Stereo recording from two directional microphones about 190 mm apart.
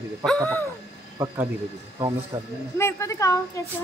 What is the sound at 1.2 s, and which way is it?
Speech, 10° right (ahead or behind).